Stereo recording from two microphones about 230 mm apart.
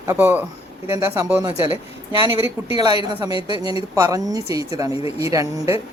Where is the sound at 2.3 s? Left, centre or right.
Left.